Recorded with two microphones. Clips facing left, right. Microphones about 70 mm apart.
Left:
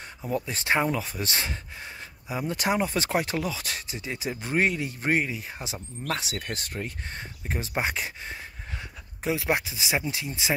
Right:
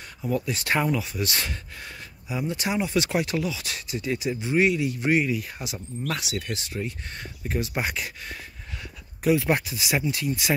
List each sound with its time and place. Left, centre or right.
0.3 s speech: left
7.2 s speech: left